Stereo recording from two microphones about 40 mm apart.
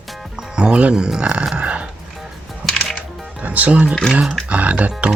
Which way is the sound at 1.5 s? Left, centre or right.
Right.